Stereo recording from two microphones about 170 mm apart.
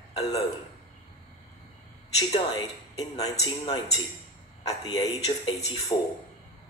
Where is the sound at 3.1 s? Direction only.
25° left (ahead or behind).